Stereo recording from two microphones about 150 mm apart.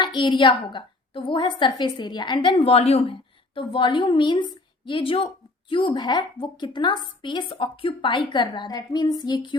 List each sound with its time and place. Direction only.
0.0 s a woman's voice: 30° left (ahead or behind)